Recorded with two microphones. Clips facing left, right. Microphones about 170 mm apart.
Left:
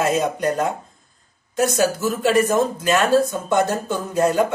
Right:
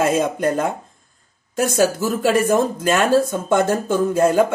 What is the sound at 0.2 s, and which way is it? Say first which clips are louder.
Speech: right 2 dB; 50° right (ahead or behind).